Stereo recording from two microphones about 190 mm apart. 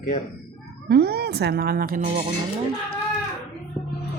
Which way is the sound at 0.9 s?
60° right (ahead or behind).